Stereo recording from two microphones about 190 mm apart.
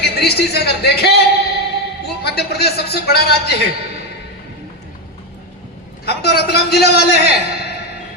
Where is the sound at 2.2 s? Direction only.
55° left (ahead or behind).